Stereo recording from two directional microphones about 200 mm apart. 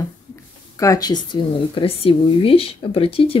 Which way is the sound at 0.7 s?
15° left (ahead or behind).